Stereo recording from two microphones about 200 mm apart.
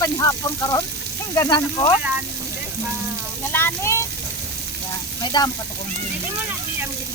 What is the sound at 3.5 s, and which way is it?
Speech, 10° left (ahead or behind).